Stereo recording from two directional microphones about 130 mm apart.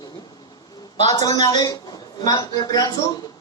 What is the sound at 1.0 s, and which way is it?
A man's voice, 30° left (ahead or behind).